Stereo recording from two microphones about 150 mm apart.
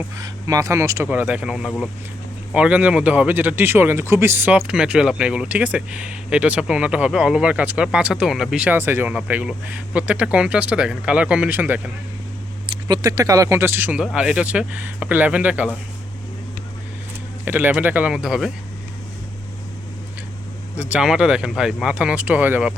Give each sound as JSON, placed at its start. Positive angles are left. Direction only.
{"t": 0.2, "sound": "speech", "side_deg": -20}
{"t": 12.6, "sound": "speech", "side_deg": -30}
{"t": 17.4, "sound": "speech", "side_deg": -10}
{"t": 20.7, "sound": "speech", "side_deg": -5}